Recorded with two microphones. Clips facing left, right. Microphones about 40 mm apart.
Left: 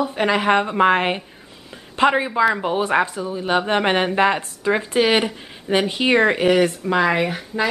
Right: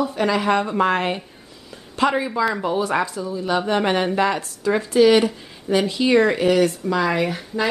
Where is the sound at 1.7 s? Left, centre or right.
Left.